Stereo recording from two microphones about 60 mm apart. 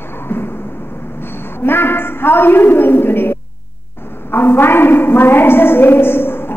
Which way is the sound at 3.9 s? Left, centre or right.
Left.